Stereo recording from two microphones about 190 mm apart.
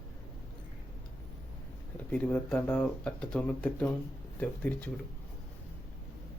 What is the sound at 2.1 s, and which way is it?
Speech, 5° left (ahead or behind).